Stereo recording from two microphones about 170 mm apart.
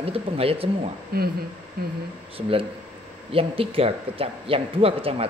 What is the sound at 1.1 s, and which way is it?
Speech, 65° right (ahead or behind).